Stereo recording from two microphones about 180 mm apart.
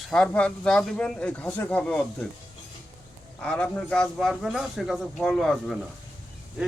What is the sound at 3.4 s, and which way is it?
A man's voice, 5° left (ahead or behind).